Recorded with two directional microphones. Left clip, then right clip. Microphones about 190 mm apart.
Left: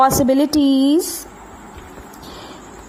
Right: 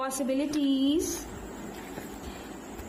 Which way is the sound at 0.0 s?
50° left (ahead or behind).